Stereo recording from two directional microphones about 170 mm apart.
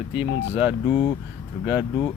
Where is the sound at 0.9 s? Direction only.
30° left (ahead or behind).